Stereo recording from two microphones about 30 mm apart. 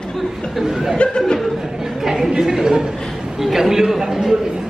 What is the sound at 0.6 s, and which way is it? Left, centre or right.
Speech, centre.